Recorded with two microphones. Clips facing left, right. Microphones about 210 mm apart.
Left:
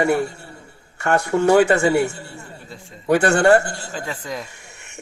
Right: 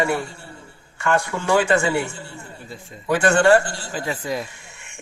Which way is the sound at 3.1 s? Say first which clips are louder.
Left 1 dB; 40° left (ahead or behind).